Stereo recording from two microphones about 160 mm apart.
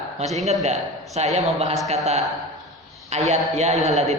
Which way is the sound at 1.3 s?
40° right (ahead or behind).